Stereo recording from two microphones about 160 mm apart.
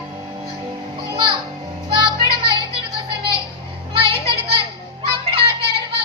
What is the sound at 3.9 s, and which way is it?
Music, 35° right (ahead or behind).